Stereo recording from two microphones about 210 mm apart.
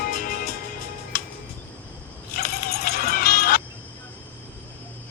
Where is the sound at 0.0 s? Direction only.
45° left (ahead or behind).